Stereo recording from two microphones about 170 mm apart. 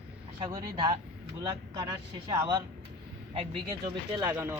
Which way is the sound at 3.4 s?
30° right (ahead or behind).